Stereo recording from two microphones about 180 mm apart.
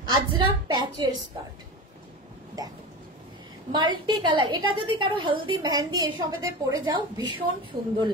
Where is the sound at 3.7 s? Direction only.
25° right (ahead or behind).